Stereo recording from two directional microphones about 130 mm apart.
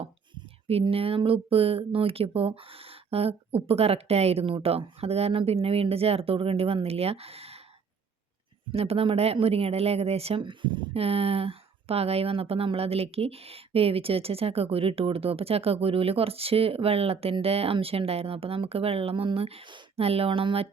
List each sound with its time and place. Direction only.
0.7 s speech: 50° right (ahead or behind)
8.7 s speech: 50° right (ahead or behind)